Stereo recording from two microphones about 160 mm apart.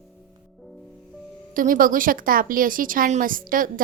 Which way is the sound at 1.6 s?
60° right (ahead or behind).